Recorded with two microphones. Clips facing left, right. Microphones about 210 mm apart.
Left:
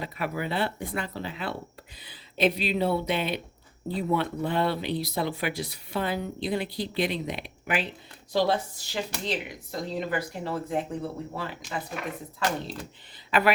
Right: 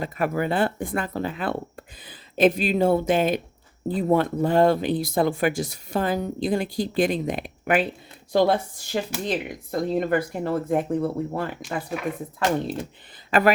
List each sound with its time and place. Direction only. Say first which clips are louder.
0.0 s speech: right 7 dB; 50° right (ahead or behind)
13.3 s speech: right 4 dB; 45° right (ahead or behind)